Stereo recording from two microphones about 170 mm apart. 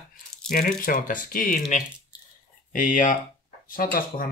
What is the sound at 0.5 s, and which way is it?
Speech, 55° left (ahead or behind).